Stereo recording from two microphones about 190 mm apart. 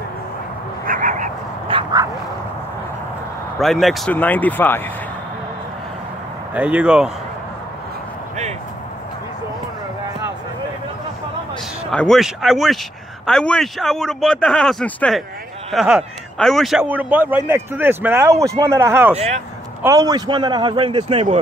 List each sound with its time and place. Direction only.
0.8 s a sound: 45° right (ahead or behind)
1.7 s bow-wow: 25° right (ahead or behind)
3.5 s speech: centre (ahead or behind)
6.5 s speech: 5° right (ahead or behind)
11.9 s a man's voice: 5° left (ahead or behind); by 21.4 s 35° right (ahead or behind)